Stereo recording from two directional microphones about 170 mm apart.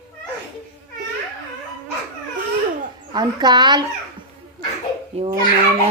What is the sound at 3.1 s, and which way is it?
Speech, 25° right (ahead or behind).